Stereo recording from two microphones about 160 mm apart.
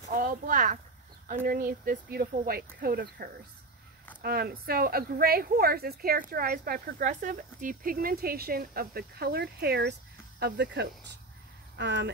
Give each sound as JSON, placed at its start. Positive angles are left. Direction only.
{"t": 0.1, "sound": "a woman's voice", "side_deg": -55}